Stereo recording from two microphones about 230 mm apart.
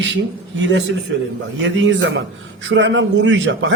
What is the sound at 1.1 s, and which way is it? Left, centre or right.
A man's voice, right.